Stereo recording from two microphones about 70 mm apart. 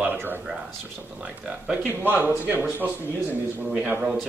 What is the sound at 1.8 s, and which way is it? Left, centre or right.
Speech, right.